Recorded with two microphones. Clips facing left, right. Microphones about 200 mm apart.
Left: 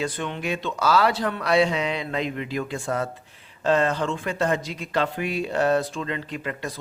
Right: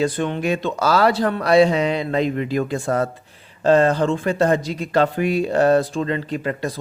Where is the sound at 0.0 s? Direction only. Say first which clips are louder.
Right 7 dB; 40° right (ahead or behind).